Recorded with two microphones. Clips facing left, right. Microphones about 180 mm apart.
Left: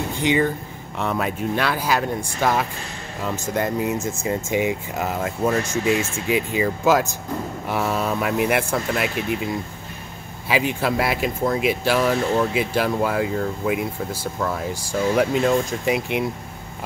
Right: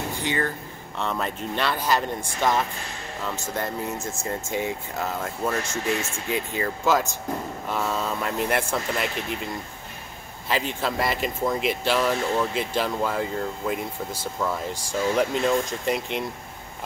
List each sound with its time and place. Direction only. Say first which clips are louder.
0.2 s speech: left 9 dB; 15° left (ahead or behind)